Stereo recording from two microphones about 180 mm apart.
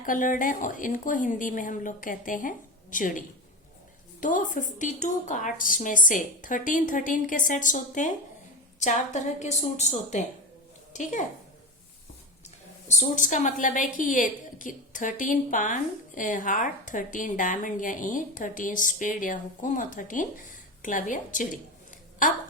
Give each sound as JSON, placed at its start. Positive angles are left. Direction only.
{"t": 0.0, "sound": "a woman's voice", "side_deg": 45}
{"t": 13.0, "sound": "a woman's voice", "side_deg": 45}